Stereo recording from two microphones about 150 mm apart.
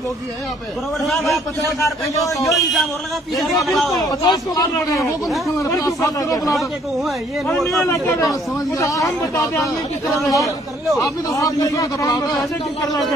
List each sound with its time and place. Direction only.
1.0 s a man's voice: centre (ahead or behind)
1.8 s speech: 20° left (ahead or behind)
2.4 s a man's voice: centre (ahead or behind)
4.0 s speech: 25° left (ahead or behind)
5.9 s speech: 25° left (ahead or behind)
7.5 s a man's voice: centre (ahead or behind)
7.8 s speech: 20° left (ahead or behind)
10.0 s a man's voice: centre (ahead or behind)
11.0 s speech: 20° left (ahead or behind)